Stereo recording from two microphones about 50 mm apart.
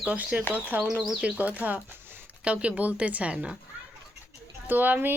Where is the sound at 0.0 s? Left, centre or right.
Right.